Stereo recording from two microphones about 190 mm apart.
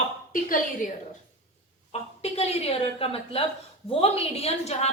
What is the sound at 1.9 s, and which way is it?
A woman's voice, 35° left (ahead or behind).